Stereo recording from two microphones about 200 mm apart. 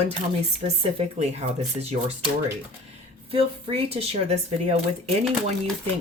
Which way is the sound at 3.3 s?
30° right (ahead or behind).